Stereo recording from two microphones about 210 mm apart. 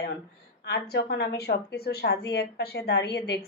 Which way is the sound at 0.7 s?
50° left (ahead or behind).